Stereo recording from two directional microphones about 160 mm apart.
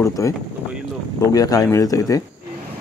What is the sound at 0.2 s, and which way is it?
Speech, 20° left (ahead or behind).